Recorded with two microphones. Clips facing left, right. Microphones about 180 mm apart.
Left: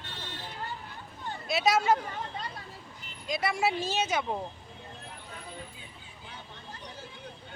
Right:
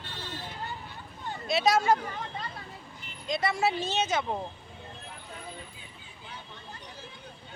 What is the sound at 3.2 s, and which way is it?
Speech, 10° left (ahead or behind).